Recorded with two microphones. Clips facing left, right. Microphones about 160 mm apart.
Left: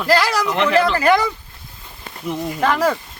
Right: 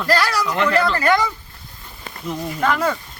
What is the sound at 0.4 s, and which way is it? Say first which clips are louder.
Speech: left 2 dB; 20° left (ahead or behind).